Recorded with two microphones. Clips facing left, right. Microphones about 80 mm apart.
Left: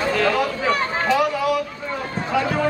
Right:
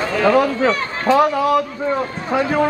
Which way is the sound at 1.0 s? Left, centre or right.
Right.